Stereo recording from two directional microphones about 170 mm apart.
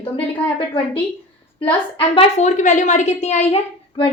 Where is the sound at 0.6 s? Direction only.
30° left (ahead or behind).